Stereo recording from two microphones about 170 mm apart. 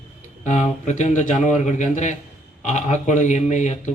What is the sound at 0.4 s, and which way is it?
A man's voice, 45° left (ahead or behind).